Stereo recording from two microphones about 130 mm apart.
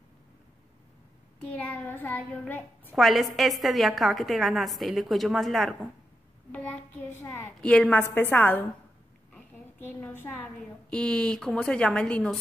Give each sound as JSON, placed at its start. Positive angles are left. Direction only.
{"t": 1.4, "sound": "a woman's voice", "side_deg": 10}
{"t": 3.0, "sound": "a woman's voice", "side_deg": 0}